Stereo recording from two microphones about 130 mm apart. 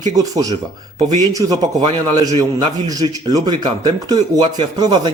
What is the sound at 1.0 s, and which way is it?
Speech, 65° right (ahead or behind).